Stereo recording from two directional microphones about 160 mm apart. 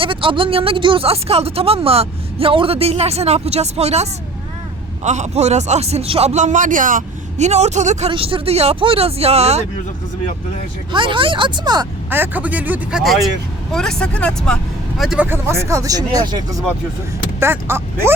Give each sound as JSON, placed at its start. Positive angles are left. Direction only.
{"t": 0.0, "sound": "a man's voice", "side_deg": -35}
{"t": 8.1, "sound": "speech", "side_deg": -35}
{"t": 10.9, "sound": "speech", "side_deg": -30}
{"t": 12.1, "sound": "speech", "side_deg": -10}
{"t": 15.3, "sound": "speech", "side_deg": -15}
{"t": 17.4, "sound": "speech", "side_deg": -15}